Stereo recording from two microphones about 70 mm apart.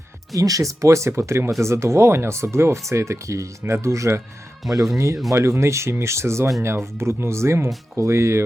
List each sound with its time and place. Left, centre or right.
0.3 s speech: right
4.6 s speech: centre
5.3 s speech: right